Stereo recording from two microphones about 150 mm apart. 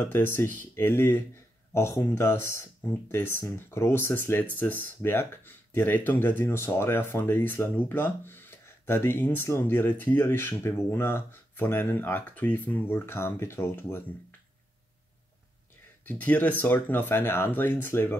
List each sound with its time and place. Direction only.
0.0 s speech: 15° left (ahead or behind)
16.1 s speech: 10° left (ahead or behind)